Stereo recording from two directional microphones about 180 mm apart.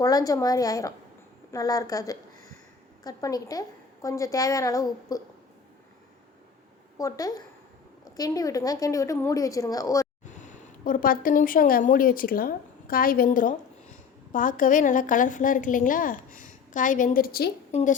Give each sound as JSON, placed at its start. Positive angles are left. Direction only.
{"t": 0.0, "sound": "a woman's voice", "side_deg": 20}
{"t": 6.9, "sound": "a woman's voice", "side_deg": 20}
{"t": 10.2, "sound": "a woman's voice", "side_deg": 45}
{"t": 17.7, "sound": "a woman's voice", "side_deg": 40}